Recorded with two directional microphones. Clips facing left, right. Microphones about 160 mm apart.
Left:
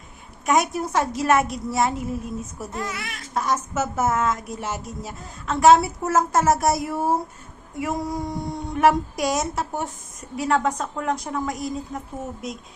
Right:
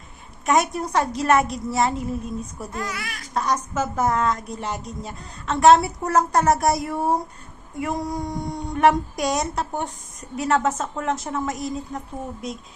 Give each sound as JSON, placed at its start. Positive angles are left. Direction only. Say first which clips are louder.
{"t": 0.4, "sound": "a woman's voice", "louder": "even", "side_deg": 0}
{"t": 2.7, "sound": "speech", "louder": "even", "side_deg": 25}
{"t": 3.3, "sound": "a woman's voice", "louder": "even", "side_deg": 5}